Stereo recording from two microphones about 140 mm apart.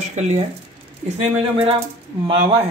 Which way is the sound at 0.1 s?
55° right (ahead or behind).